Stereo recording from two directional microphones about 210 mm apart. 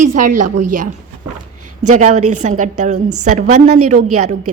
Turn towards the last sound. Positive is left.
turn(degrees=-35)  # may be behind; listen again after turning